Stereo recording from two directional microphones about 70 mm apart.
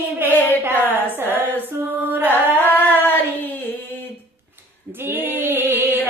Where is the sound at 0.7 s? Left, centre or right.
Left.